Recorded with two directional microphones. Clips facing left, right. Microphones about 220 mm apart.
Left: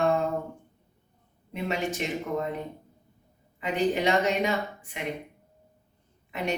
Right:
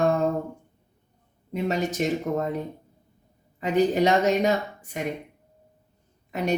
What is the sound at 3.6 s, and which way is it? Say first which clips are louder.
Speech: right 5 dB; 40° right (ahead or behind).